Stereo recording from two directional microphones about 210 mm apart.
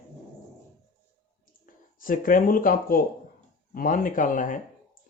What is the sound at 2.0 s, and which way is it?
Speech, 40° left (ahead or behind).